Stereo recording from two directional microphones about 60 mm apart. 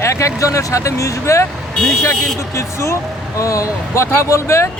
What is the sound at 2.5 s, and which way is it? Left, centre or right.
Speech, left.